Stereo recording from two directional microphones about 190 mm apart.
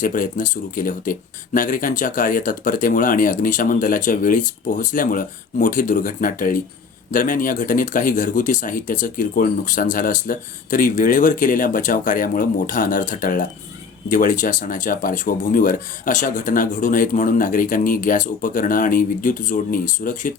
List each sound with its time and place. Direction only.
0.0 s speech: 45° left (ahead or behind)